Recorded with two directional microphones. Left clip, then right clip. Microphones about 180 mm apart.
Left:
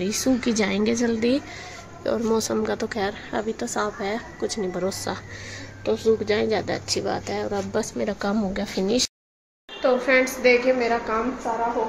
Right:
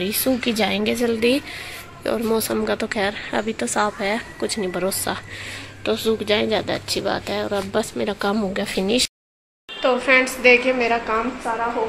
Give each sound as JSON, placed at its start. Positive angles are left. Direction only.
{"t": 0.0, "sound": "a woman's voice", "side_deg": 0}
{"t": 5.9, "sound": "a woman's voice", "side_deg": -15}
{"t": 6.2, "sound": "a woman's voice", "side_deg": -5}